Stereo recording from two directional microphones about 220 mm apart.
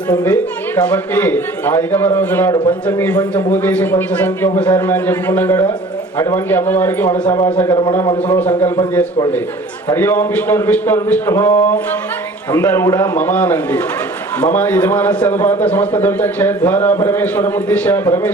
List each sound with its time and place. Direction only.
0.8 s a man's voice: 10° left (ahead or behind)
7.8 s a man's voice: 20° left (ahead or behind)